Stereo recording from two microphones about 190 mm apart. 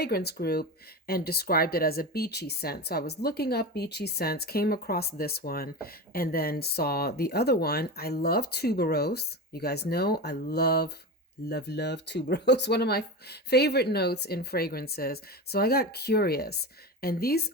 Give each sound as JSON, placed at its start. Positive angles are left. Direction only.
{"t": 0.0, "sound": "speech", "side_deg": 55}